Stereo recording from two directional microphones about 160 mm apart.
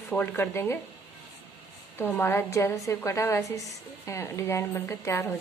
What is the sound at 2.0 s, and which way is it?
A woman's voice, 15° left (ahead or behind).